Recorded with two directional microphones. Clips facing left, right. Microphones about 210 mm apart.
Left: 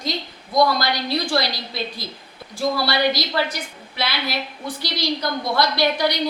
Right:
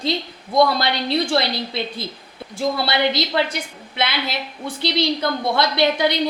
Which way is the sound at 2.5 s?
25° right (ahead or behind).